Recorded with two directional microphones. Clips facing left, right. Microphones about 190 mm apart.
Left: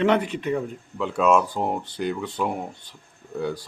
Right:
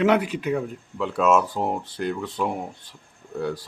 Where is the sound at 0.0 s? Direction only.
5° right (ahead or behind).